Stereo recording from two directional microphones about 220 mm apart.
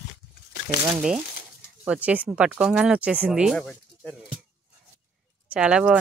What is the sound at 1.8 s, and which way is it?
Speech, 5° right (ahead or behind).